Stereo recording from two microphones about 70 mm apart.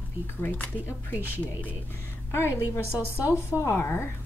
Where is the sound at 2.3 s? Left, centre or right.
Left.